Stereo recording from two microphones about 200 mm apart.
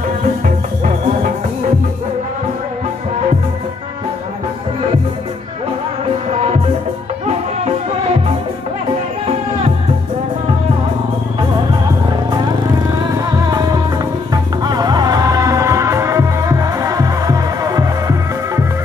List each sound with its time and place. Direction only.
6.3 s music: 35° right (ahead or behind)
13.1 s music: 20° right (ahead or behind)